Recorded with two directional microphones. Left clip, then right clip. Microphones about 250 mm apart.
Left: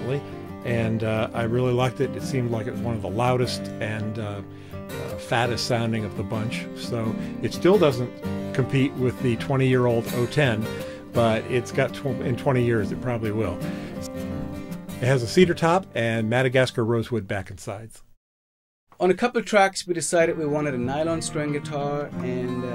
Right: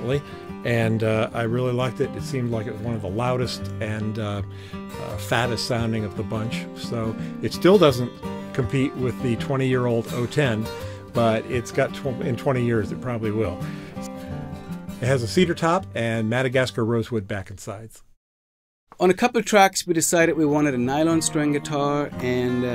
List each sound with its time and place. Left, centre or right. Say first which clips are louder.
0.7 s speech: right 3 dB; centre
7.6 s speech: right 3 dB; centre
8.5 s speech: even; centre
15.0 s speech: left 2 dB; centre
18.9 s speech: right 2 dB; right